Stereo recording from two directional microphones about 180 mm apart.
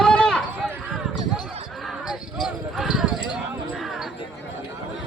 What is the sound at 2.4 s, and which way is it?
Clip-clop, centre (ahead or behind).